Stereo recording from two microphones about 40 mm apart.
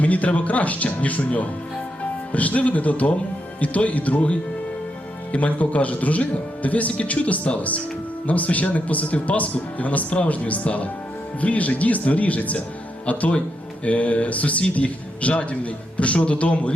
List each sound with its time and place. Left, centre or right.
0.0 s speech: left